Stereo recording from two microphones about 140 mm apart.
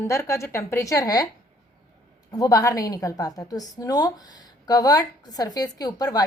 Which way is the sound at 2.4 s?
25° left (ahead or behind).